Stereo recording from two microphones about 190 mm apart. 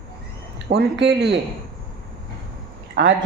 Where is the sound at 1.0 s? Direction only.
65° right (ahead or behind).